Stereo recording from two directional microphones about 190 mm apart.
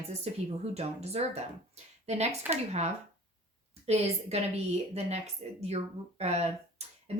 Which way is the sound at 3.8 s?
35° right (ahead or behind).